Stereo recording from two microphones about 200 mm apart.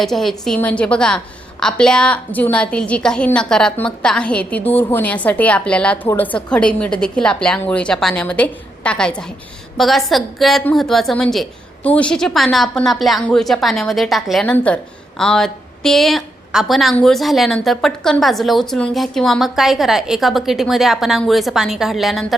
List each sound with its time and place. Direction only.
0.0 s a woman's voice: centre (ahead or behind)